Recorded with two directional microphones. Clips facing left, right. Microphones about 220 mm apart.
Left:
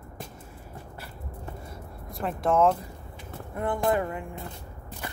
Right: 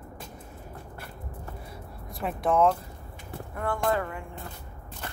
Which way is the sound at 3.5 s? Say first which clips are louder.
Left 2 dB; 20° left (ahead or behind).